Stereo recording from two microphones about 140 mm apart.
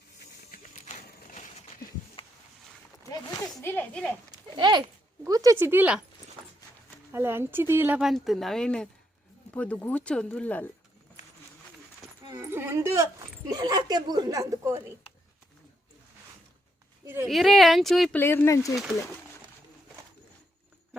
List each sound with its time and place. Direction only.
0.5 s horse: 65° left (ahead or behind)
3.6 s speech: 15° left (ahead or behind)
4.3 s a sound: 30° right (ahead or behind)
5.2 s speech: 25° right (ahead or behind)
7.1 s speech: 15° right (ahead or behind)
8.0 s speech: centre (ahead or behind)
12.3 s a woman's voice: 20° right (ahead or behind)
17.2 s speech: centre (ahead or behind)
18.2 s speech: 15° left (ahead or behind)